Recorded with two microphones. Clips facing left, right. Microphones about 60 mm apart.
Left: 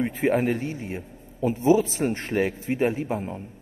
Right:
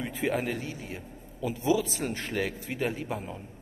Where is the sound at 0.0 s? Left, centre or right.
Left.